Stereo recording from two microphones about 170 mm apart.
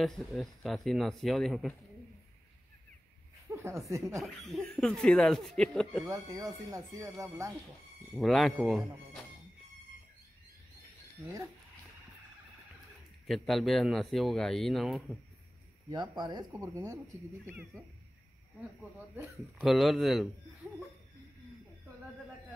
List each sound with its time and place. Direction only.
0.0 s speech: centre (ahead or behind)
3.5 s speech: 15° right (ahead or behind)
4.1 s speech: centre (ahead or behind)
6.0 s speech: 20° right (ahead or behind)
8.1 s speech: centre (ahead or behind)
13.3 s speech: centre (ahead or behind)
15.9 s speech: 25° right (ahead or behind)
17.5 s speech: 10° right (ahead or behind)
19.6 s speech: centre (ahead or behind)